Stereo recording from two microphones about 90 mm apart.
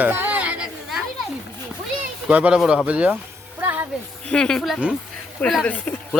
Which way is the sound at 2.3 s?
15° right (ahead or behind).